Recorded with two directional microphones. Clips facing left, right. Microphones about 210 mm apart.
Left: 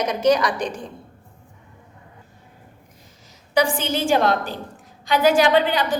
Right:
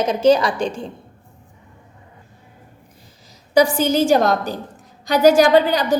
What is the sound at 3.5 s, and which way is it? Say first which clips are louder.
A woman's voice: right 5 dB; 40° right (ahead or behind).